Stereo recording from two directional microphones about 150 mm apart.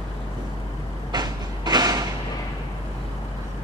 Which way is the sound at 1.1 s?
25° right (ahead or behind).